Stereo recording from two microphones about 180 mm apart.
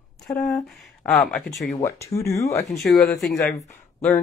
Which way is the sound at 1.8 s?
15° left (ahead or behind).